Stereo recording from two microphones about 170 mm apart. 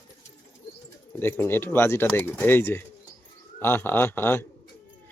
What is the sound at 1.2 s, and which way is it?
Speech, 15° left (ahead or behind).